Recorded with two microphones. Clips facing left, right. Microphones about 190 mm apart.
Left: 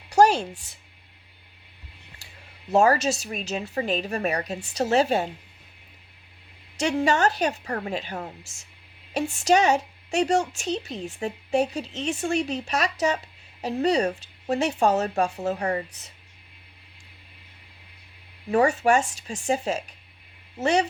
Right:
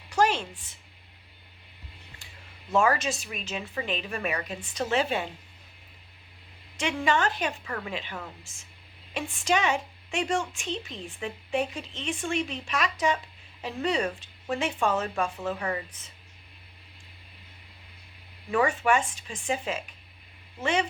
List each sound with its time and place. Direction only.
0.2 s a sound: 40° left (ahead or behind)
2.7 s a woman's voice: 40° left (ahead or behind)
6.7 s a woman's voice: 40° left (ahead or behind)
9.4 s a woman's voice: 40° left (ahead or behind)
18.5 s a woman's voice: 40° left (ahead or behind)